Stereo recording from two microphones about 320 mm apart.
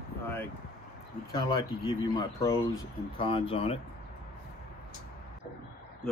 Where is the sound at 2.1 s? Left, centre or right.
Centre.